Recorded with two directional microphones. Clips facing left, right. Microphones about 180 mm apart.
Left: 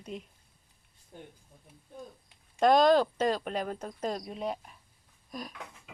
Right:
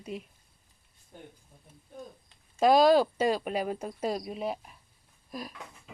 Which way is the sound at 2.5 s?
5° right (ahead or behind).